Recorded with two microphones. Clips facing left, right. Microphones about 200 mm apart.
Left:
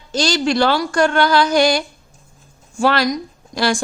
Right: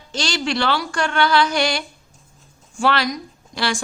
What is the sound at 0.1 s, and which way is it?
Speech, 40° left (ahead or behind).